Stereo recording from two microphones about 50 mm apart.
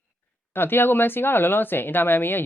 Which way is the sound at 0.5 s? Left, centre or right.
Left.